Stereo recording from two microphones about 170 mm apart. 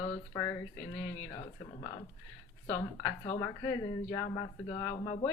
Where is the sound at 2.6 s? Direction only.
20° left (ahead or behind).